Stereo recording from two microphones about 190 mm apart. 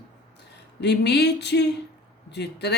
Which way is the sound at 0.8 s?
65° left (ahead or behind).